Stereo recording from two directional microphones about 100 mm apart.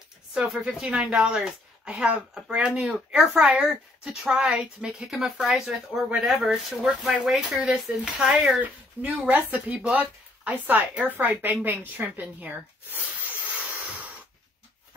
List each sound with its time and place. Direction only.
0.3 s a woman's voice: 10° right (ahead or behind)
8.5 s a woman's voice: 15° right (ahead or behind)